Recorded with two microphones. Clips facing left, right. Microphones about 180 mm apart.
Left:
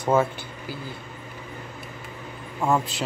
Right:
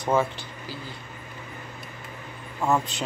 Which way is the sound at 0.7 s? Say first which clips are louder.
Left 3 dB; 55° left (ahead or behind).